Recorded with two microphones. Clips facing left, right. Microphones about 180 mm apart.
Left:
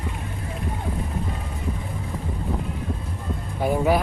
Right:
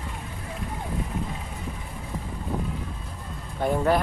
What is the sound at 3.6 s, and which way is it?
Vehicle, 5° left (ahead or behind).